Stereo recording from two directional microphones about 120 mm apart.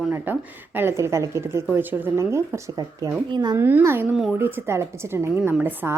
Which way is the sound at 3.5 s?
20° right (ahead or behind).